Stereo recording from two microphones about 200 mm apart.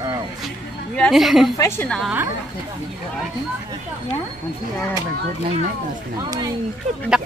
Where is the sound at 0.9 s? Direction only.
Centre (ahead or behind).